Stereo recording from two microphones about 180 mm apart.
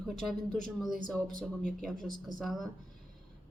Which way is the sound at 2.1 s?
25° right (ahead or behind).